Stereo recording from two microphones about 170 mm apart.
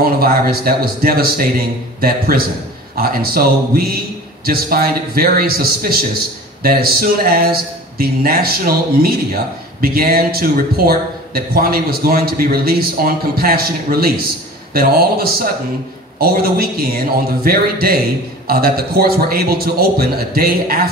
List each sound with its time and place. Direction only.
0.0 s speech: 60° right (ahead or behind)